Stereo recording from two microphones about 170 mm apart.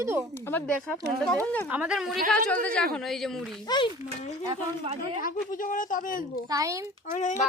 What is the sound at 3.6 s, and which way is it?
Speech, 25° left (ahead or behind).